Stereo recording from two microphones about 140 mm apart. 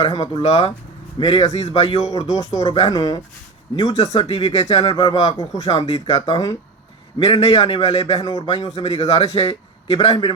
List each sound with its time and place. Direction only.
0.1 s speech: 30° left (ahead or behind)
0.4 s a man's voice: 50° left (ahead or behind)
1.2 s a man's voice: 25° left (ahead or behind)
1.6 s a man's voice: 45° left (ahead or behind)
2.2 s a man's voice: 25° left (ahead or behind)
3.8 s a man's voice: 45° left (ahead or behind)
4.5 s a man's voice: 30° left (ahead or behind)
5.8 s a man's voice: 50° left (ahead or behind)
6.3 s a man's voice: 30° left (ahead or behind)
7.8 s a man's voice: 45° left (ahead or behind)
8.2 s a man's voice: 25° left (ahead or behind)
8.4 s a man's voice: 45° left (ahead or behind)